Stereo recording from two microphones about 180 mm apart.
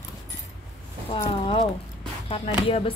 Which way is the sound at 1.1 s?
30° left (ahead or behind).